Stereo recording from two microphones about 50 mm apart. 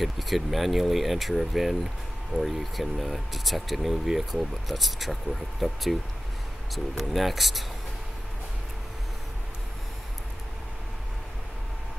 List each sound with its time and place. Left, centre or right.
0.0 s speech: centre